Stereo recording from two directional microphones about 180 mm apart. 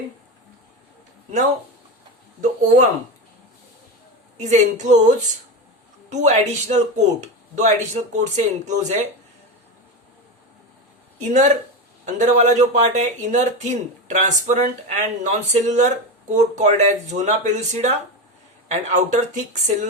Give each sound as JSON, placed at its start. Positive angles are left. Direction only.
{"t": 2.4, "sound": "speech", "side_deg": -45}
{"t": 4.4, "sound": "speech", "side_deg": -40}
{"t": 6.1, "sound": "speech", "side_deg": -40}
{"t": 11.2, "sound": "speech", "side_deg": -40}